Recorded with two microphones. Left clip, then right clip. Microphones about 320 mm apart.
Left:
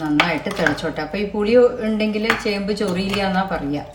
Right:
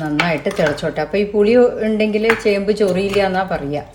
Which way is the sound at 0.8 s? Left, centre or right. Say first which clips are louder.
Right 5 dB; centre.